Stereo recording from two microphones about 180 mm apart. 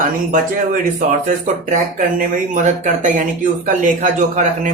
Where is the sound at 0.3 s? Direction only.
50° right (ahead or behind).